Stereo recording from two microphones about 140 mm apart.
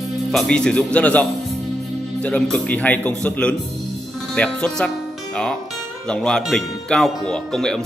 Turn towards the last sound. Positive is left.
turn(degrees=5)  # may be behind; listen again after turning